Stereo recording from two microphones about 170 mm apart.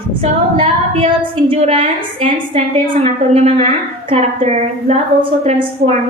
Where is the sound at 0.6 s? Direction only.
30° right (ahead or behind).